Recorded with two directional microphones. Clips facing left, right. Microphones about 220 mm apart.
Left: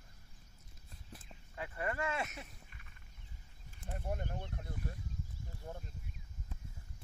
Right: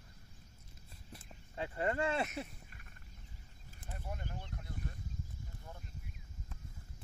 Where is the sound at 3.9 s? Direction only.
50° left (ahead or behind).